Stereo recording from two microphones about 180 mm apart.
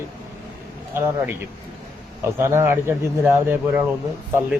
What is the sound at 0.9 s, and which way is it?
Speech, 15° right (ahead or behind).